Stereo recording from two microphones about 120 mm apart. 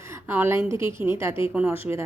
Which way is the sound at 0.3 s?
20° right (ahead or behind).